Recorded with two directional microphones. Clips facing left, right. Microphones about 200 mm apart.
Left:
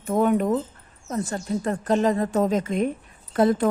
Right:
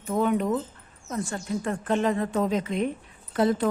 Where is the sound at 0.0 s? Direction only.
50° left (ahead or behind).